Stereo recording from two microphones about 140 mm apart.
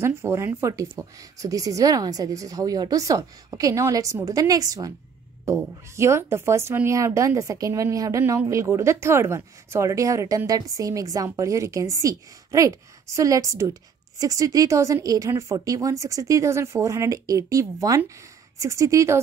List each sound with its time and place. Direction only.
0.0 s speech: 20° right (ahead or behind)
5.9 s speech: 20° right (ahead or behind)